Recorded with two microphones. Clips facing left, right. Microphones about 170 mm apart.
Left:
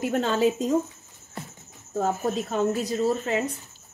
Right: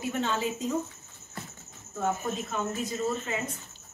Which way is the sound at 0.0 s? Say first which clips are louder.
Left 7 dB; 50° left (ahead or behind).